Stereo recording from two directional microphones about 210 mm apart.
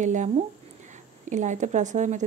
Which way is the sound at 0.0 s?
35° right (ahead or behind).